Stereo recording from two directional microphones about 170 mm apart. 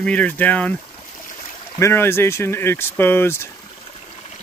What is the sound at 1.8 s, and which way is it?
Speech, 15° left (ahead or behind).